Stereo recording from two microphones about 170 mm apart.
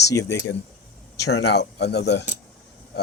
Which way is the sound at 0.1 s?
20° left (ahead or behind).